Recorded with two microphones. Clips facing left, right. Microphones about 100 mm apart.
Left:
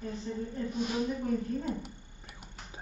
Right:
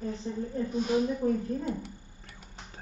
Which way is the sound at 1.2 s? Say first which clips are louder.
Right 2 dB; 30° right (ahead or behind).